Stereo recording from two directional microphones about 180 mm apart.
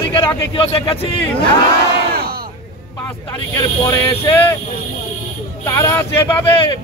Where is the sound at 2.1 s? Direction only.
55° right (ahead or behind).